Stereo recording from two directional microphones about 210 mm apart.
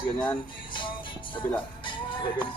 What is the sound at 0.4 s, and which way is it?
Music, 25° left (ahead or behind).